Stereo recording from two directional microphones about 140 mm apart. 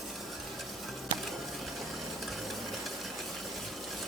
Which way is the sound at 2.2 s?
Centre (ahead or behind).